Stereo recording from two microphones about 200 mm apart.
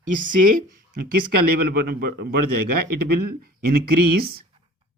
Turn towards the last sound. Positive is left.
turn(degrees=-50)  # may be behind; listen again after turning